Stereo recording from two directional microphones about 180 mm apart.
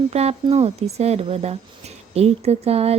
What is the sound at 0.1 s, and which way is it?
Speech, 35° right (ahead or behind).